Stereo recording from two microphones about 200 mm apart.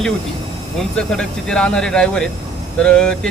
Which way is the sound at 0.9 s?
5° left (ahead or behind).